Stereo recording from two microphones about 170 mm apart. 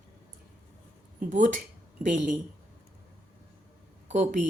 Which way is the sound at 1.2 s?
50° right (ahead or behind).